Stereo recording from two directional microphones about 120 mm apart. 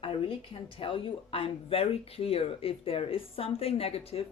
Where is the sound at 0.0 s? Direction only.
50° left (ahead or behind).